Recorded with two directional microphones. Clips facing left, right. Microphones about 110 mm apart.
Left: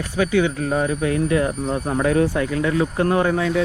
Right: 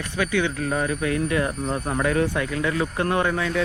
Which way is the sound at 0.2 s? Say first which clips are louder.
Left 5 dB; 35° left (ahead or behind).